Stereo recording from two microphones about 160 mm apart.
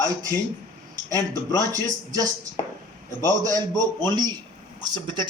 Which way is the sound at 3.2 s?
25° right (ahead or behind).